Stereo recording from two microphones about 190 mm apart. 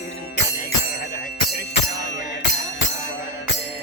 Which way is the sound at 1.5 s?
65° left (ahead or behind).